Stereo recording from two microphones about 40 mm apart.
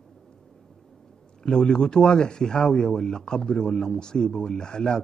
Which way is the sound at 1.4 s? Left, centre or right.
Left.